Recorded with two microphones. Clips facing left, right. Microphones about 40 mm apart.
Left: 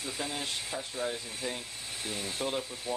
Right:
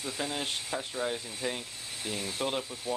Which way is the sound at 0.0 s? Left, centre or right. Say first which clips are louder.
Right 2 dB; centre.